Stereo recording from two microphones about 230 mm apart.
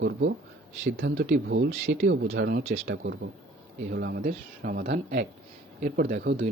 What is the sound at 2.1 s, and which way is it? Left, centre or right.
Speech, right.